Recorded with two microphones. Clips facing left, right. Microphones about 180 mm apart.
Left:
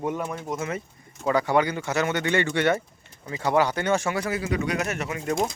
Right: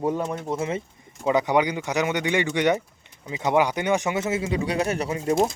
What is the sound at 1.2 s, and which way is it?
Speech, 20° right (ahead or behind).